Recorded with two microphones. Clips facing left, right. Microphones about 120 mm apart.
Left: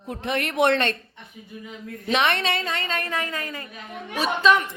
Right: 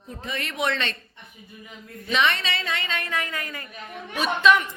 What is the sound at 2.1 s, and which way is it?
Speech, 55° left (ahead or behind).